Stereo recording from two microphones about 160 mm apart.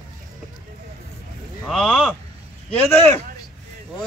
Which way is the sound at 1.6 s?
5° left (ahead or behind).